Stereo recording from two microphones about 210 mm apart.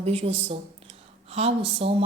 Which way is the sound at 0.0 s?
25° right (ahead or behind).